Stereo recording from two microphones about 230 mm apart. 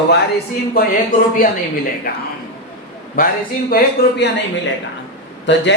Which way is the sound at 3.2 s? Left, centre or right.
Left.